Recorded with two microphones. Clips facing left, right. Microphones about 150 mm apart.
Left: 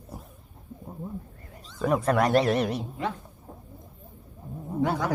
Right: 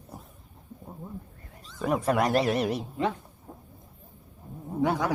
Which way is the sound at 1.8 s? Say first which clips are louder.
Left 2 dB; 5° right (ahead or behind).